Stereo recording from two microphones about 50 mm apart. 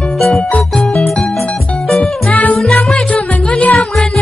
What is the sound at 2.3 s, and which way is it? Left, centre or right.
Music, left.